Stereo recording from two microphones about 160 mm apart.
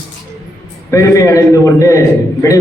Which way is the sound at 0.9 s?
20° left (ahead or behind).